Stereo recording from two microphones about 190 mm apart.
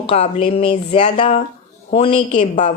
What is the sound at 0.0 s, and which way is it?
A woman's voice, 30° left (ahead or behind).